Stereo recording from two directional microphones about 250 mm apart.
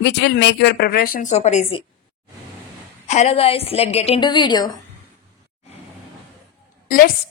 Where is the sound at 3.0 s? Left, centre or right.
Left.